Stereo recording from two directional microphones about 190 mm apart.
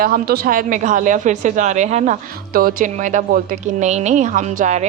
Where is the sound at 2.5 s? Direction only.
50° right (ahead or behind).